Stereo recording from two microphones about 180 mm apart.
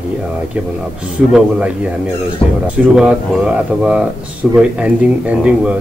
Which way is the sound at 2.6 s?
5° right (ahead or behind).